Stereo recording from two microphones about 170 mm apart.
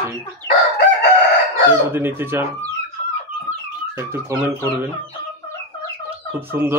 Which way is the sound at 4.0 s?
15° right (ahead or behind).